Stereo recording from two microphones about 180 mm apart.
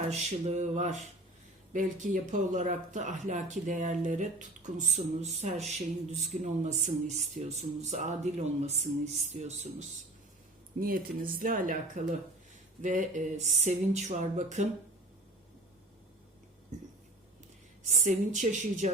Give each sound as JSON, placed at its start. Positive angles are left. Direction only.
{"t": 0.1, "sound": "speech", "side_deg": -40}
{"t": 10.8, "sound": "speech", "side_deg": -55}
{"t": 17.8, "sound": "speech", "side_deg": -45}